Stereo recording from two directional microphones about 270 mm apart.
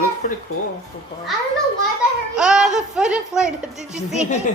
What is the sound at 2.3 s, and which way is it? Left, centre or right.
A woman's voice, centre.